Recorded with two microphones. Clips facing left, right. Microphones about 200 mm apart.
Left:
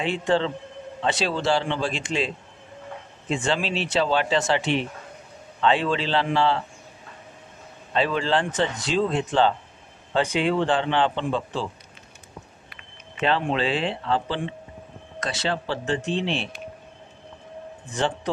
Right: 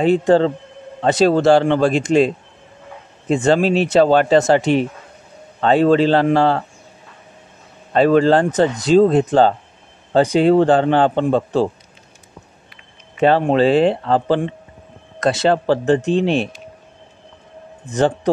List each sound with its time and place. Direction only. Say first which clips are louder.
0.0 s speech: right 10 dB; 40° right (ahead or behind)
7.9 s speech: right 10 dB; 45° right (ahead or behind)
13.2 s speech: right 10 dB; 45° right (ahead or behind)
17.8 s speech: right 9 dB; 45° right (ahead or behind)